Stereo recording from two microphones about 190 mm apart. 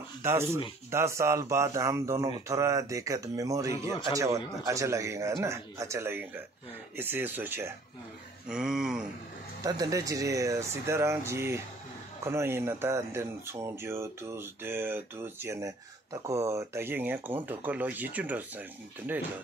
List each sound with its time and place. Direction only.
0.2 s speech: 15° right (ahead or behind)
9.6 s speech: 20° right (ahead or behind)